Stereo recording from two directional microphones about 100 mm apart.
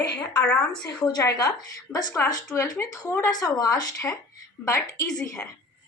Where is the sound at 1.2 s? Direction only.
35° left (ahead or behind).